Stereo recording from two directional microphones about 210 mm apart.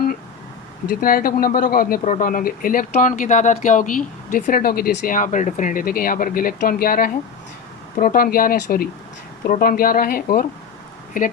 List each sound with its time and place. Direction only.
0.9 s speech: 45° left (ahead or behind)